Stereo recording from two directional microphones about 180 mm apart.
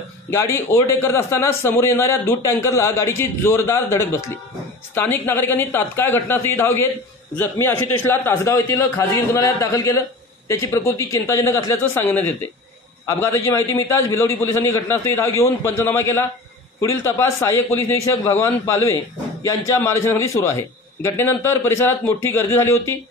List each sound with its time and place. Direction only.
0.3 s a man's voice: 15° left (ahead or behind)